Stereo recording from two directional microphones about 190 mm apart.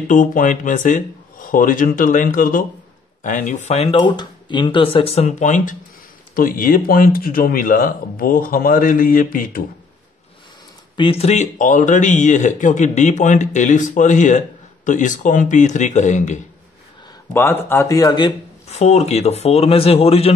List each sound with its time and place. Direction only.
0.1 s speech: 45° left (ahead or behind)
11.0 s speech: 30° left (ahead or behind)
17.3 s speech: 10° left (ahead or behind)
18.7 s speech: 35° left (ahead or behind)